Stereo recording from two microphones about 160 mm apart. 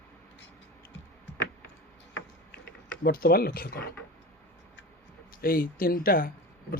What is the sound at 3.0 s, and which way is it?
Speech, 70° left (ahead or behind).